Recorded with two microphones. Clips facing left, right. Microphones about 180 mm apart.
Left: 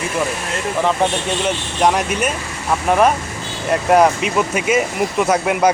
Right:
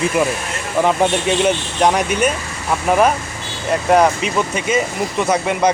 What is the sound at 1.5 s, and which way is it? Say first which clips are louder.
Speech: left 2 dB; centre (ahead or behind).